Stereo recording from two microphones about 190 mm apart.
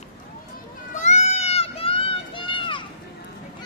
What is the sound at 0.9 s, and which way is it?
Run, 35° left (ahead or behind).